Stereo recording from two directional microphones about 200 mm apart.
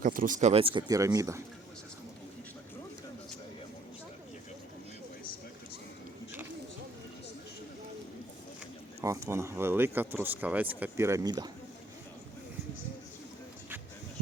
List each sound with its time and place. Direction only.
0.0 s speech: 45° right (ahead or behind); by 1.4 s 15° right (ahead or behind)
9.0 s speech: 15° right (ahead or behind)